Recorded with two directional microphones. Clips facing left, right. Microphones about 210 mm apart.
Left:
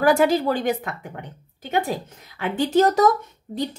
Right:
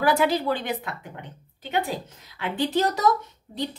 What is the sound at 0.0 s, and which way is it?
A woman's voice, 45° left (ahead or behind).